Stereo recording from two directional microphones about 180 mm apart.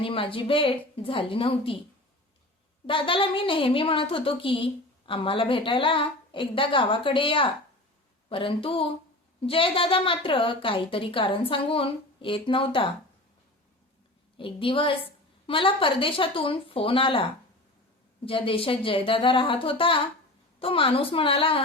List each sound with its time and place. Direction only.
0.0 s speech: 30° left (ahead or behind)
2.8 s speech: 30° left (ahead or behind)
14.3 s speech: 30° left (ahead or behind)
18.3 s a woman's voice: 30° left (ahead or behind)